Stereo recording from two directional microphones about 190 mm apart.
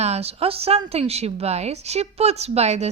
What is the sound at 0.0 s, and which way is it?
Speech, 35° right (ahead or behind).